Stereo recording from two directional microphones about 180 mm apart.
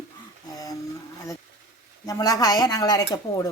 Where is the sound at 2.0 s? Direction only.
20° left (ahead or behind).